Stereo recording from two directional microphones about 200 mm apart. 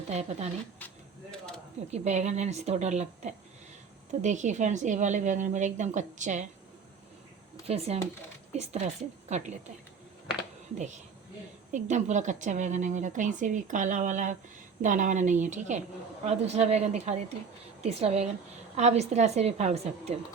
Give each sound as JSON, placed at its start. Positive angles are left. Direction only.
{"t": 0.1, "sound": "a woman's voice", "side_deg": -35}
{"t": 1.3, "sound": "a sound", "side_deg": 5}
{"t": 1.9, "sound": "a woman's voice", "side_deg": -35}
{"t": 7.7, "sound": "a woman's voice", "side_deg": -30}
{"t": 9.3, "sound": "a woman's voice", "side_deg": -35}
{"t": 10.8, "sound": "a woman's voice", "side_deg": -35}